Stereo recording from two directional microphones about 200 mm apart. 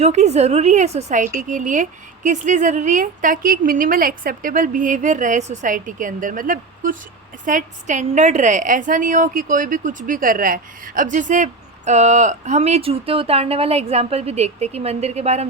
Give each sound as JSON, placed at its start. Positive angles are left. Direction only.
{"t": 0.0, "sound": "speech", "side_deg": -35}